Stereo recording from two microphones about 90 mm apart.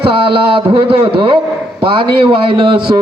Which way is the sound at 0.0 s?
75° right (ahead or behind).